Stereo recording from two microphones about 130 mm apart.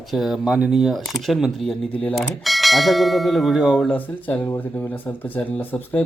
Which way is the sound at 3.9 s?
10° left (ahead or behind).